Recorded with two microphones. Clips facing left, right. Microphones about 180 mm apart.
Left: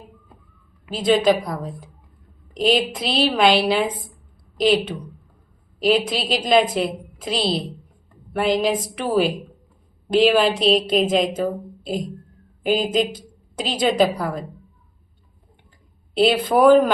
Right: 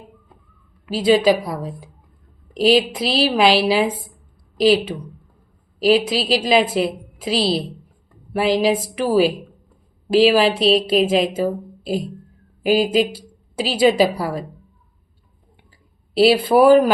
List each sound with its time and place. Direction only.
0.9 s a woman's voice: 5° right (ahead or behind)
16.2 s a woman's voice: 5° right (ahead or behind)